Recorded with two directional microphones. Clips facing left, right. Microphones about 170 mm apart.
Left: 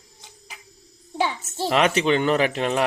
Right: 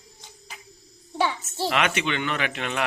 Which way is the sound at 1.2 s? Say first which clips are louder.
Left 1 dB; 15° left (ahead or behind).